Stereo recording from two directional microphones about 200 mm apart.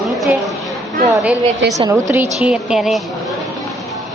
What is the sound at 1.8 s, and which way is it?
A woman's voice, 15° right (ahead or behind).